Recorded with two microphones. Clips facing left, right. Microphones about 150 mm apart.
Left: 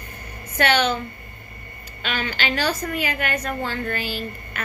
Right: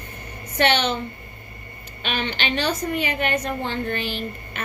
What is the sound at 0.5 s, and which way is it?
Speech, 25° right (ahead or behind).